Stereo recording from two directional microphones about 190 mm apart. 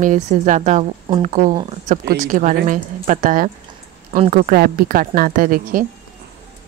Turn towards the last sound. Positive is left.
turn(degrees=-45)  # may be behind; listen again after turning